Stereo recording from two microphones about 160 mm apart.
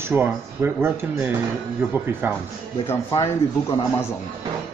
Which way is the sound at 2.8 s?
15° left (ahead or behind).